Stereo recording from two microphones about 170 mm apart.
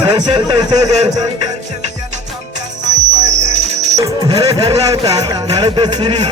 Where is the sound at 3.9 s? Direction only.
20° right (ahead or behind).